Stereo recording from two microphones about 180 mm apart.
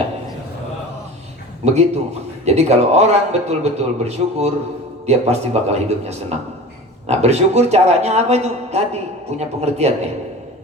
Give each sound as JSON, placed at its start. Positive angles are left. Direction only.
{"t": 1.6, "sound": "a man's voice", "side_deg": -35}